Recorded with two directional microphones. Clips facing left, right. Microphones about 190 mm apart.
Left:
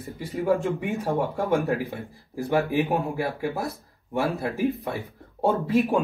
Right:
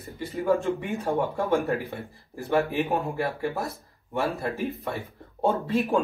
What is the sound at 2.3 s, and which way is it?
Speech, 15° left (ahead or behind).